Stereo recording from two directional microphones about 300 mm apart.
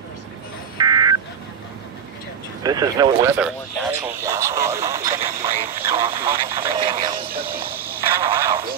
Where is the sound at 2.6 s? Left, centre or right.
Centre.